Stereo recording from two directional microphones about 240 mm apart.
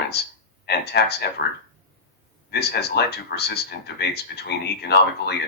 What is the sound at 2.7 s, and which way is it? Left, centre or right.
Speech, left.